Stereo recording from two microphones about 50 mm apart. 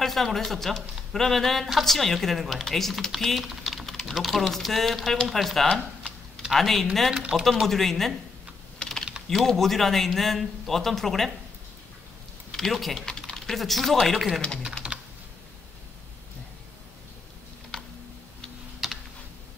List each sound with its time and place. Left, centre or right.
0.0 s a woman's voice: centre
3.4 s typing: centre
3.8 s a woman's voice: centre
5.7 s a sound: centre
6.5 s a woman's voice: centre
7.2 s speech: centre
7.6 s a woman's voice: centre
8.8 s typing: left
9.3 s a woman's voice: centre
12.5 s a woman's voice: centre
14.8 s computer keyboard: right
17.7 s a sound: centre
18.8 s computer keyboard: centre